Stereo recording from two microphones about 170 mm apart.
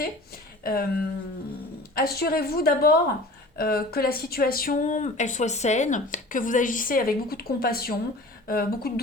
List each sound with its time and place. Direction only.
0.6 s speech: 60° left (ahead or behind)
2.0 s a woman's voice: 65° left (ahead or behind)